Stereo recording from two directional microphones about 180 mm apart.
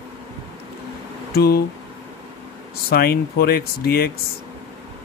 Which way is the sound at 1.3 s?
60° left (ahead or behind).